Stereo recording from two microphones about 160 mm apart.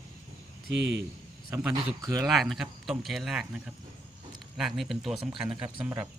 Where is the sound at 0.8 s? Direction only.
90° right.